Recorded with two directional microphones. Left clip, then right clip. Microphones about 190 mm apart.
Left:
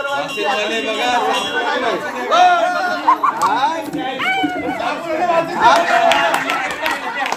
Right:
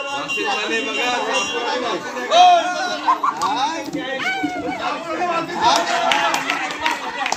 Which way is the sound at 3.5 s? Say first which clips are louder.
Left 4 dB; 25° right (ahead or behind).